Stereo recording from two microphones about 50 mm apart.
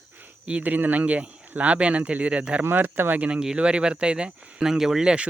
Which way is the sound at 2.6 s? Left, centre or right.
Right.